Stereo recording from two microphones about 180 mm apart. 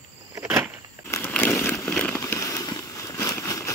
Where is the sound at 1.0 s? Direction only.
10° left (ahead or behind).